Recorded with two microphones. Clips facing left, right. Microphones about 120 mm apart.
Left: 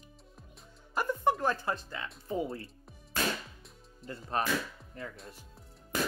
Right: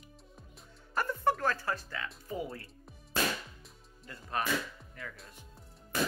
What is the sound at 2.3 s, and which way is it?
Speech, 25° left (ahead or behind).